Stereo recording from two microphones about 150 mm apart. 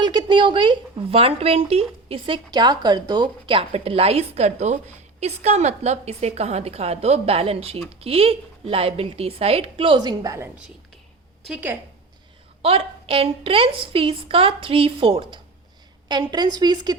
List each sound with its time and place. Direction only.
0.0 s a woman's voice: 30° right (ahead or behind)
11.4 s a woman's voice: 10° right (ahead or behind)
12.6 s a woman's voice: 40° right (ahead or behind)